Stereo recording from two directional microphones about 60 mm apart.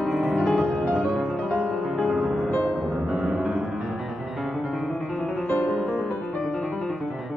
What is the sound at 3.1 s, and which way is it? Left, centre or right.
Music, centre.